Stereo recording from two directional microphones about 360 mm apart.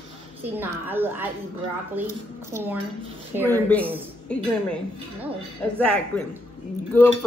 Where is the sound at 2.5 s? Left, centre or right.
Centre.